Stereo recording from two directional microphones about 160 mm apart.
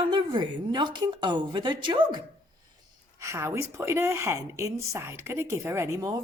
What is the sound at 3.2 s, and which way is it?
A woman's voice, 15° right (ahead or behind).